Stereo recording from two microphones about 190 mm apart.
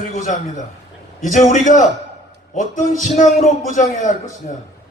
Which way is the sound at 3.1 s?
40° left (ahead or behind).